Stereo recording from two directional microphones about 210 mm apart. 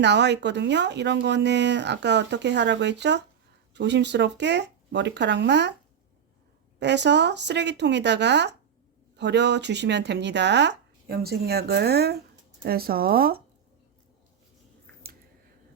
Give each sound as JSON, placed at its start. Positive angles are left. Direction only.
{"t": 0.0, "sound": "speech", "side_deg": -55}
{"t": 6.7, "sound": "speech", "side_deg": -55}